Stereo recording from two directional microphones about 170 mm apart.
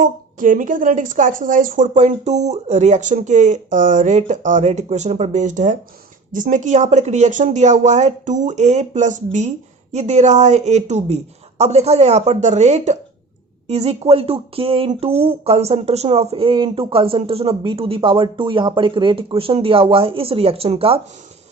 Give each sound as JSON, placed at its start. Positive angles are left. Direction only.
{"t": 0.0, "sound": "speech", "side_deg": -50}